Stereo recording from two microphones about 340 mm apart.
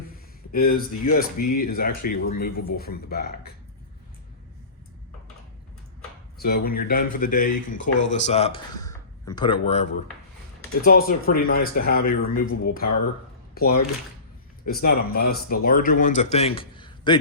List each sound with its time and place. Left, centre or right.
0.5 s speech: left
6.4 s speech: left
8.2 s speech: centre